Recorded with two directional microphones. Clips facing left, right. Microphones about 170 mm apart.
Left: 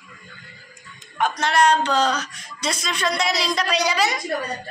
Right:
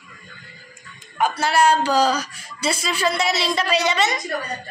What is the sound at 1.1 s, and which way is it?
Speech, 5° right (ahead or behind).